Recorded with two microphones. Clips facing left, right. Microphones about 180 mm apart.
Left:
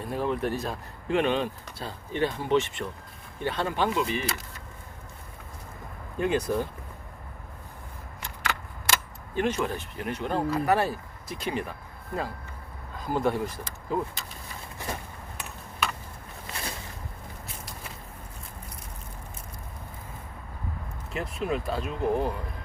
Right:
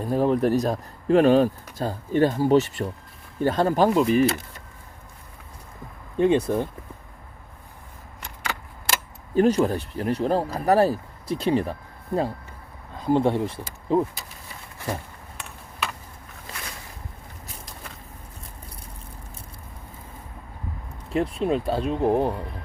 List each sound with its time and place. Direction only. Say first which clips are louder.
0.0 s speech: right 7 dB; 35° right (ahead or behind)
6.1 s speech: right 6 dB; 25° right (ahead or behind)
9.3 s speech: right 8 dB; 35° right (ahead or behind)
15.4 s tick: even; centre (ahead or behind)
21.1 s speech: right 7 dB; 30° right (ahead or behind)